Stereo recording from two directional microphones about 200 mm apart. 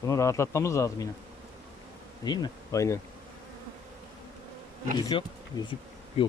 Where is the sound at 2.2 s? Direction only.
20° left (ahead or behind).